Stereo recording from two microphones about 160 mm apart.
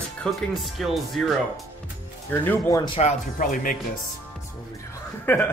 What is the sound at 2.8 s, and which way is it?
Speech, 40° left (ahead or behind).